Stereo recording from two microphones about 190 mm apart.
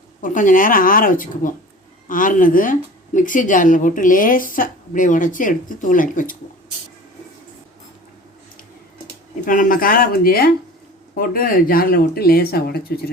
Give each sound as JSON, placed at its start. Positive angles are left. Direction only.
{"t": 0.2, "sound": "speech", "side_deg": 45}
{"t": 9.5, "sound": "speech", "side_deg": 45}